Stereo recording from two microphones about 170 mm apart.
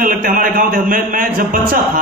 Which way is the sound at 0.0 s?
55° right (ahead or behind).